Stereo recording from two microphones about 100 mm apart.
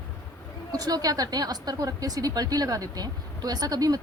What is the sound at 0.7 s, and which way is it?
Speech, 40° right (ahead or behind).